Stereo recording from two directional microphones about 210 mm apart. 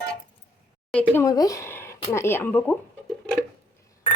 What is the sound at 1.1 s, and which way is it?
Speech, 15° left (ahead or behind).